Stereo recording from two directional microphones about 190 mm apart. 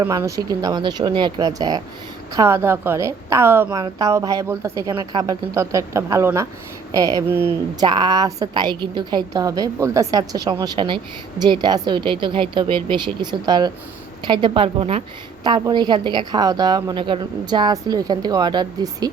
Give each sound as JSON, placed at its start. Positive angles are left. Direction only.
{"t": 0.0, "sound": "a woman's voice", "side_deg": -15}